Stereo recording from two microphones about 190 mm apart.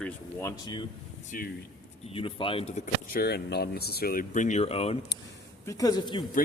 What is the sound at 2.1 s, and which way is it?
Speech, 30° left (ahead or behind).